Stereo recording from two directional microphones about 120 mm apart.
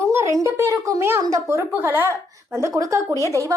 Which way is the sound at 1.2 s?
25° right (ahead or behind).